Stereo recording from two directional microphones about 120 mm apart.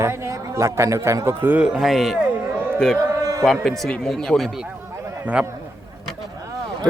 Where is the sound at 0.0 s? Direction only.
25° right (ahead or behind); by 2.2 s centre (ahead or behind).